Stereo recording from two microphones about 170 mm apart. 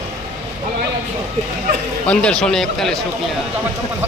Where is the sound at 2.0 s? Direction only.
5° left (ahead or behind).